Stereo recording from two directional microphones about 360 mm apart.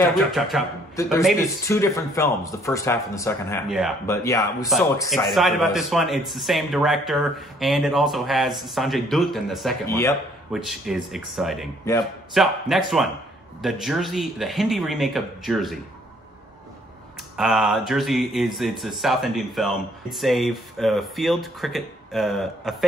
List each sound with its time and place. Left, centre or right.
0.1 s speech: centre
17.4 s speech: centre